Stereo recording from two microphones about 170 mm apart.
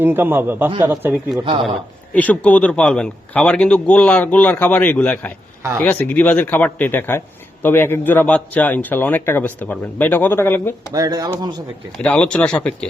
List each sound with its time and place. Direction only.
0.0 s a man's voice: 10° right (ahead or behind)
2.1 s a man's voice: 10° left (ahead or behind)
10.9 s speech: 20° right (ahead or behind)
12.0 s a man's voice: 5° left (ahead or behind)